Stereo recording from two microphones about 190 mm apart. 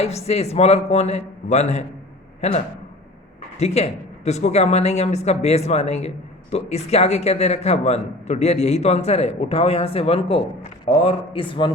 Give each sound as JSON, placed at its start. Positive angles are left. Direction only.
{"t": 0.0, "sound": "a man's voice", "side_deg": 35}
{"t": 3.6, "sound": "a man's voice", "side_deg": 35}